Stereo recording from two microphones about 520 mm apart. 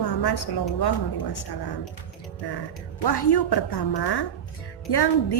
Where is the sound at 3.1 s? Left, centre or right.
Left.